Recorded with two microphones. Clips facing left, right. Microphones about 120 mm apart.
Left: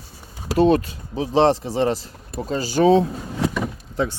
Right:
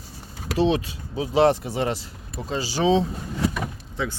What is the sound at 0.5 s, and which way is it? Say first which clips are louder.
Speech: left 5 dB; 50° left (ahead or behind).